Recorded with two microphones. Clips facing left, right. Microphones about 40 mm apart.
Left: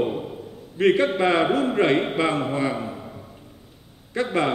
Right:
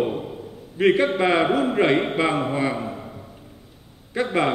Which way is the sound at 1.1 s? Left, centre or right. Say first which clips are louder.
Right 1 dB; centre.